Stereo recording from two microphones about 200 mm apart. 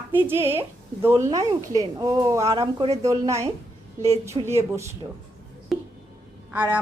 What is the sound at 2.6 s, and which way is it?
Speech, 25° right (ahead or behind).